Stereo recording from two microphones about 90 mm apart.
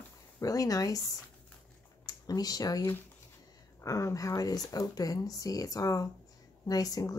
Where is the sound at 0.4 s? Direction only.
40° left (ahead or behind).